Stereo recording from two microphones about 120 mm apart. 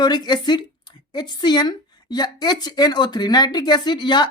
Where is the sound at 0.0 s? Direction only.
35° left (ahead or behind).